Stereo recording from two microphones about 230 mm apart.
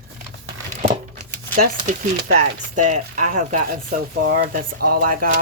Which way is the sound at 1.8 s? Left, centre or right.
Right.